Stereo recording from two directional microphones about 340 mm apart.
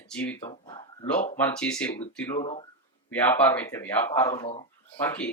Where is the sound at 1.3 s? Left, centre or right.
Centre.